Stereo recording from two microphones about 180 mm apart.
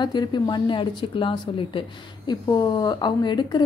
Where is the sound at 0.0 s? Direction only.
25° left (ahead or behind).